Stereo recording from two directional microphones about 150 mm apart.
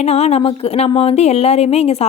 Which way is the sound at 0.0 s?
45° left (ahead or behind).